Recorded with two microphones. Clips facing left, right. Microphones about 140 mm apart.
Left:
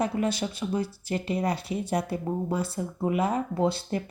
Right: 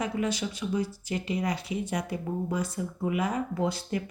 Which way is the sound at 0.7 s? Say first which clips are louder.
Left 1 dB; 60° left (ahead or behind).